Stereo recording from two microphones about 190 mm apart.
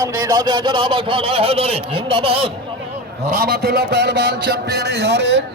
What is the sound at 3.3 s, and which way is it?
A man's voice, 55° right (ahead or behind).